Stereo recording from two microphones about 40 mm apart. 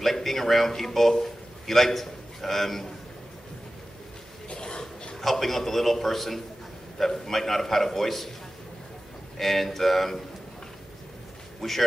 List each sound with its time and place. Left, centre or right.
0.0 s a man's voice: centre
4.5 s a sound: left
5.2 s a man's voice: centre
9.4 s a man's voice: centre
11.6 s a man's voice: centre